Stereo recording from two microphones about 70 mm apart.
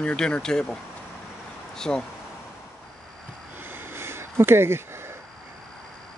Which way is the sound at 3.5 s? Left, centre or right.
Right.